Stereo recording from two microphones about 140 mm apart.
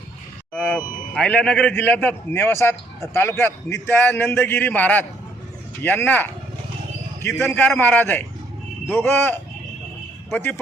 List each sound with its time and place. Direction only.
0.5 s vehicle: 5° left (ahead or behind)
1.1 s a man's voice: 5° left (ahead or behind)
7.3 s a man's voice: 5° left (ahead or behind)